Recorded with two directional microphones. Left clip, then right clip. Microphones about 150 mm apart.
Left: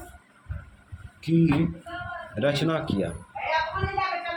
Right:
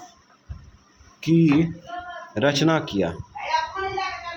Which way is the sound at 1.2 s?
45° right (ahead or behind).